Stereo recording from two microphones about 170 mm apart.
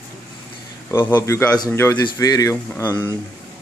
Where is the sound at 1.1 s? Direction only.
15° left (ahead or behind).